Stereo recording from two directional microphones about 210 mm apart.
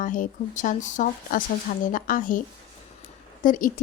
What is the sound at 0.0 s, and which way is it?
Speech, 40° left (ahead or behind).